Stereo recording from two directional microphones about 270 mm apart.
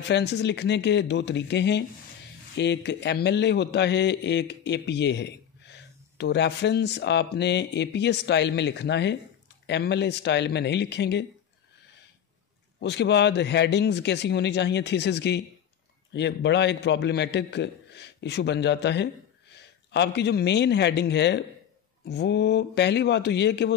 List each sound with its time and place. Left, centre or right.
0.1 s speech: left
12.8 s speech: left